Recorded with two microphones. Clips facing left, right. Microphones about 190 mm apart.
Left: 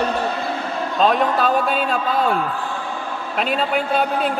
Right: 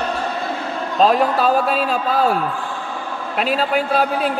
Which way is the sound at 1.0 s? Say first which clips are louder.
Right 2 dB; 5° right (ahead or behind).